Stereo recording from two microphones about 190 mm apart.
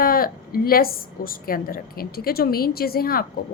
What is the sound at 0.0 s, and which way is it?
A woman's voice, 50° left (ahead or behind).